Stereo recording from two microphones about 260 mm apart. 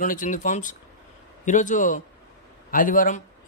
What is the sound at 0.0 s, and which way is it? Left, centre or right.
A man's voice, left.